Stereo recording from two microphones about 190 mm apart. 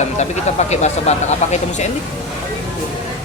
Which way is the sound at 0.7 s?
35° left (ahead or behind).